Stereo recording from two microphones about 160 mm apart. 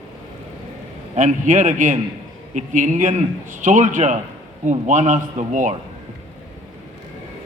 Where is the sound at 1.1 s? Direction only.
50° right (ahead or behind).